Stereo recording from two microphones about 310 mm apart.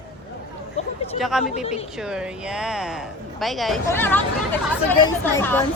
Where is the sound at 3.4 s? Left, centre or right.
Centre.